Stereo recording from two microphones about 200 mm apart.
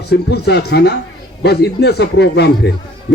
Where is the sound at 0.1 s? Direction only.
55° left (ahead or behind).